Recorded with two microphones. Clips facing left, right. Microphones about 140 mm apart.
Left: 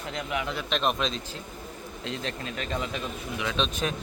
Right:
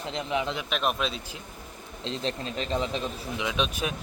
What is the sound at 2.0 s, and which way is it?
Speech, 30° right (ahead or behind).